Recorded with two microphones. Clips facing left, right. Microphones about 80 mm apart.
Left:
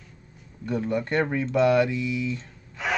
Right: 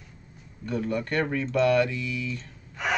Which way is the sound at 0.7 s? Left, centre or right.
Centre.